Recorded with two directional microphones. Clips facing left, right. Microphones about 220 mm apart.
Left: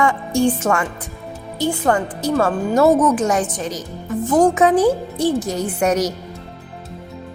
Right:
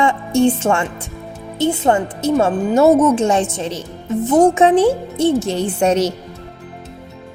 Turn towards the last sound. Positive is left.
turn(degrees=-25)  # may be behind; listen again after turning